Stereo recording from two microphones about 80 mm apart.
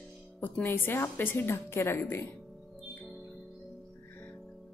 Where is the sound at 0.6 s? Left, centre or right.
Left.